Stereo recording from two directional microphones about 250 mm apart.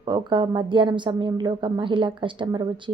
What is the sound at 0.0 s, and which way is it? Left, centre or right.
A woman's voice, centre.